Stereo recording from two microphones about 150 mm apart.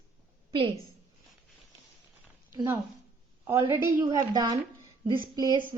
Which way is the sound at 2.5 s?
20° right (ahead or behind).